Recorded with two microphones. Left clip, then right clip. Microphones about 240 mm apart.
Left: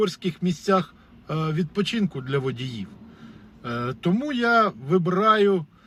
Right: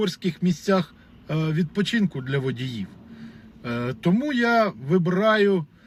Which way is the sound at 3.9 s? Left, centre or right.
Centre.